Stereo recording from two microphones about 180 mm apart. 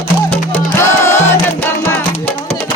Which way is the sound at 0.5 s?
15° left (ahead or behind).